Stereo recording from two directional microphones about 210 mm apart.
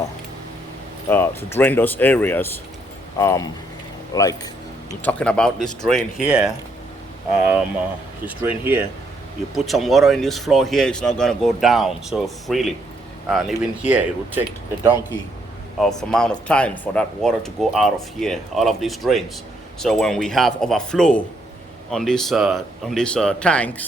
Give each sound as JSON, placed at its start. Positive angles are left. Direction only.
{"t": 1.1, "sound": "speech", "side_deg": 10}
{"t": 5.2, "sound": "speech", "side_deg": 5}
{"t": 15.8, "sound": "speech", "side_deg": 0}